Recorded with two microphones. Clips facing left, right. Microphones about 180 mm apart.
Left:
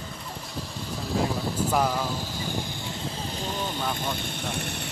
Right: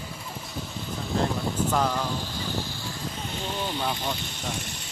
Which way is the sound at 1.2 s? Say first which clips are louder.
Right 2 dB; 10° left (ahead or behind).